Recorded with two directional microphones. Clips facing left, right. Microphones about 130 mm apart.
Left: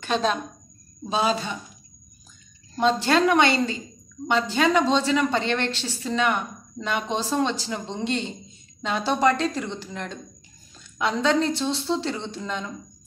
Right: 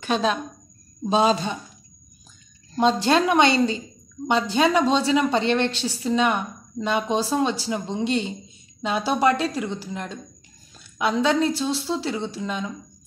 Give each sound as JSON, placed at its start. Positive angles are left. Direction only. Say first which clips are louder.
{"t": 0.0, "sound": "a woman's voice", "louder": "right 1 dB", "side_deg": -5}
{"t": 1.0, "sound": "a woman's voice", "louder": "right 4 dB", "side_deg": -25}
{"t": 2.8, "sound": "a woman's voice", "louder": "right 1 dB", "side_deg": -20}